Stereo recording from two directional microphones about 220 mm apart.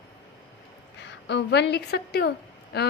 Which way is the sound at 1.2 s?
50° left (ahead or behind).